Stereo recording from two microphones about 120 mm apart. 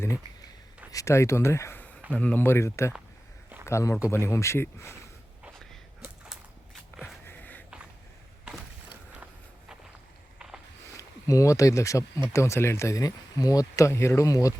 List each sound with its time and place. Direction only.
0.9 s a man's voice: 25° left (ahead or behind)
7.0 s a sound: 15° left (ahead or behind)
8.4 s walk: 10° right (ahead or behind)
10.9 s speech: 30° left (ahead or behind)